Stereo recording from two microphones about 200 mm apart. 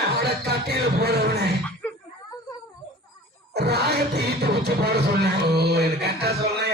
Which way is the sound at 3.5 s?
55° right (ahead or behind).